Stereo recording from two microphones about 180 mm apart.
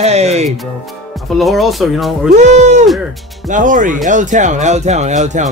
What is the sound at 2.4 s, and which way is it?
Speech, 40° right (ahead or behind).